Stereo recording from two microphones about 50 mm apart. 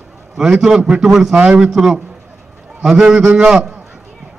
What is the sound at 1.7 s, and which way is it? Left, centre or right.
A man's voice, centre.